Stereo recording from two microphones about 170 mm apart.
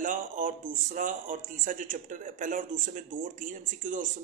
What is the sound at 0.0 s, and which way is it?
Speech, 50° right (ahead or behind).